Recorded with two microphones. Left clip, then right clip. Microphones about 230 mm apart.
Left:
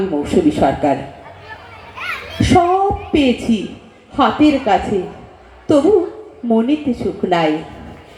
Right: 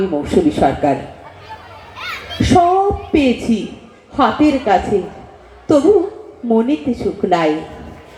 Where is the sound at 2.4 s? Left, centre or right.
Left.